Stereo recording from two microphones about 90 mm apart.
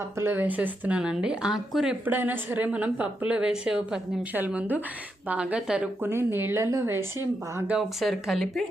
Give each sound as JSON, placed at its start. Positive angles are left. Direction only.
{"t": 0.2, "sound": "a woman's voice", "side_deg": -25}
{"t": 2.0, "sound": "a woman's voice", "side_deg": -25}
{"t": 4.4, "sound": "a woman's voice", "side_deg": -20}
{"t": 6.0, "sound": "a woman's voice", "side_deg": -25}
{"t": 8.0, "sound": "speech", "side_deg": 0}